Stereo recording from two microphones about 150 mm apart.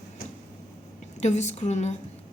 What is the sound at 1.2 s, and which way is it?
Speech, 50° left (ahead or behind).